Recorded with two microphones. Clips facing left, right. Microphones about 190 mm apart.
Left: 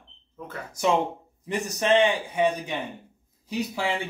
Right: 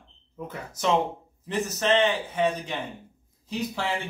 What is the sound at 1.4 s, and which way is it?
A man's voice, 10° left (ahead or behind).